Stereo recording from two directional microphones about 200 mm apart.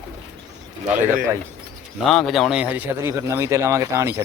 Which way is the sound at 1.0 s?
10° right (ahead or behind).